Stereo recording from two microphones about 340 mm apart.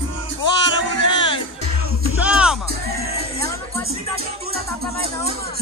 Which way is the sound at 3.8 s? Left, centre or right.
Right.